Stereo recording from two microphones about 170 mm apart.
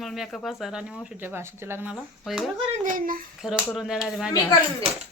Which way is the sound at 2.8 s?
50° right (ahead or behind).